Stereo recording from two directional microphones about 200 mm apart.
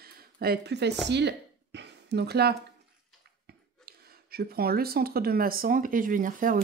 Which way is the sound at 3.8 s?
50° right (ahead or behind).